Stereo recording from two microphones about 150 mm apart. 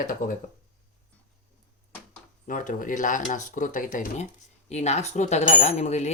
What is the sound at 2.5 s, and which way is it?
Speech, 60° left (ahead or behind).